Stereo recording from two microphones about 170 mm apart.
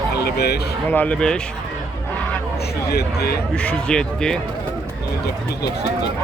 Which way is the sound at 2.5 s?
70° left (ahead or behind).